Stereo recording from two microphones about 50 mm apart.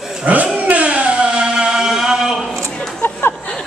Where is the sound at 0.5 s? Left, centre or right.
Right; by 2.5 s centre.